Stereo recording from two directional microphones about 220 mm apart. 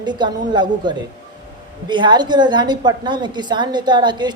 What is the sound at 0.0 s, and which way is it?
Speech, 20° right (ahead or behind).